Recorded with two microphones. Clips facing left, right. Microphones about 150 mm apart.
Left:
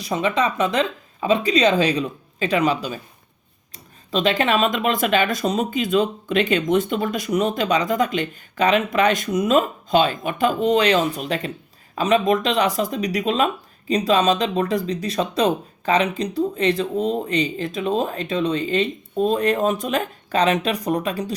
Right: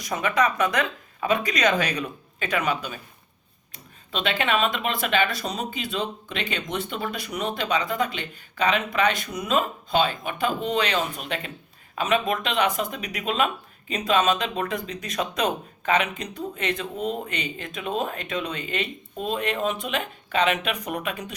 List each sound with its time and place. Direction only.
0.0 s speech: 25° left (ahead or behind)